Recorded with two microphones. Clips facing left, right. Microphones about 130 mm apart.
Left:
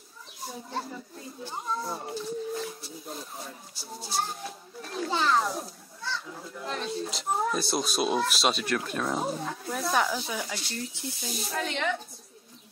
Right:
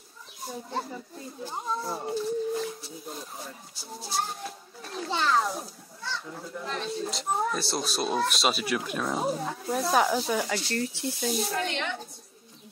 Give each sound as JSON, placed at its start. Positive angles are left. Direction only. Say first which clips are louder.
{"t": 0.5, "sound": "speech", "louder": "right 2 dB", "side_deg": 0}
{"t": 9.9, "sound": "speech", "louder": "right 4 dB", "side_deg": -35}
{"t": 10.9, "sound": "speech", "louder": "right 7 dB", "side_deg": 0}